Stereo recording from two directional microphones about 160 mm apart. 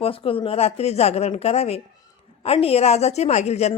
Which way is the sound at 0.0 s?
35° left (ahead or behind).